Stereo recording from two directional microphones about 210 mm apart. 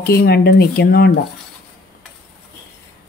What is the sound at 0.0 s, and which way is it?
Speech, 50° left (ahead or behind).